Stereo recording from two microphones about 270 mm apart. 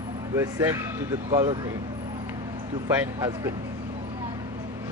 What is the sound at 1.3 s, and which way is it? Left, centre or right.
Speech, centre.